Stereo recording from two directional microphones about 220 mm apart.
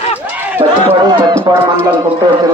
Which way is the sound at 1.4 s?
15° right (ahead or behind).